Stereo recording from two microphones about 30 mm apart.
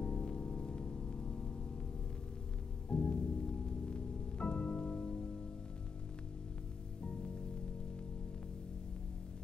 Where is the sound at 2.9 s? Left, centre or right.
Left.